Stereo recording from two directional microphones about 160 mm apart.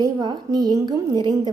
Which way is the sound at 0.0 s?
25° right (ahead or behind).